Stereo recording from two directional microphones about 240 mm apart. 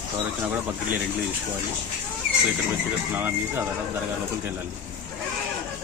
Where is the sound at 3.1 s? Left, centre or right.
Centre.